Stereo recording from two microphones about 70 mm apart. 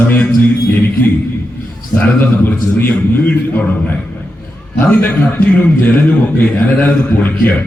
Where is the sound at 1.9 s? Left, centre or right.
Left.